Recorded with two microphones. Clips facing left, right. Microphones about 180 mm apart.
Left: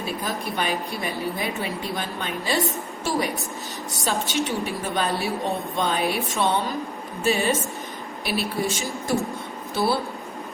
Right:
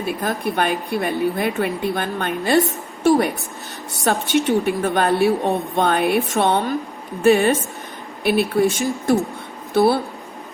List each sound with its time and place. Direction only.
0.0 s a woman's voice: 55° right (ahead or behind)